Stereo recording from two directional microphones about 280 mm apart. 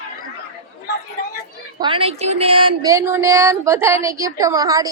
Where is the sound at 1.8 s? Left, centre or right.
Centre.